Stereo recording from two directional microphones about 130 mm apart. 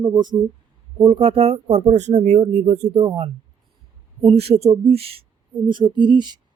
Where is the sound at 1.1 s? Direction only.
50° right (ahead or behind).